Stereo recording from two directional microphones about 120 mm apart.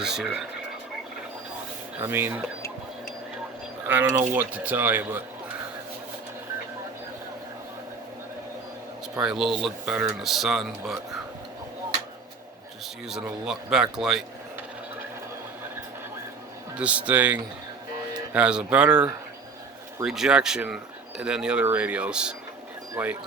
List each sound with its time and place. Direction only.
0.0 s a man's voice: 5° right (ahead or behind)
2.0 s speech: 20° right (ahead or behind)
3.8 s speech: 15° right (ahead or behind)
9.2 s a man's voice: 5° right (ahead or behind)
13.1 s a man's voice: 5° right (ahead or behind)
16.7 s speech: 10° right (ahead or behind)
20.1 s speech: 5° right (ahead or behind)